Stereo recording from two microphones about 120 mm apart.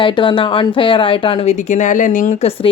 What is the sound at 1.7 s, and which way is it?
Speech, 90° left.